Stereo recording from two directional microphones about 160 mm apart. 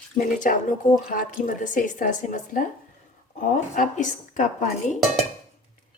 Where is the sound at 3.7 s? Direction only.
50° left (ahead or behind).